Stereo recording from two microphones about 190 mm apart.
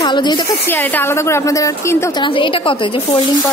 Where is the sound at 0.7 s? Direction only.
10° left (ahead or behind); by 3.0 s 25° left (ahead or behind).